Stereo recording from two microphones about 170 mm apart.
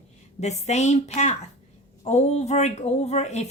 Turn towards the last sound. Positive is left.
turn(degrees=40)  # may be behind; listen again after turning